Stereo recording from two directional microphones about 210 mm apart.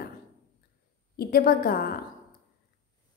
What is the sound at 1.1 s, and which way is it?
Speech, 45° left (ahead or behind).